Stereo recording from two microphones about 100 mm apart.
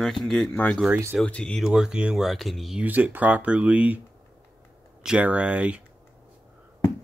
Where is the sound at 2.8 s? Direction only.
15° right (ahead or behind).